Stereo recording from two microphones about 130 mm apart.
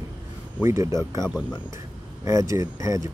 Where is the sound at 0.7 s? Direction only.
25° right (ahead or behind).